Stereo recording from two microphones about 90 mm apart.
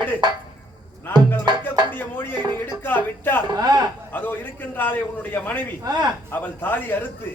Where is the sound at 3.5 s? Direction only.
50° right (ahead or behind).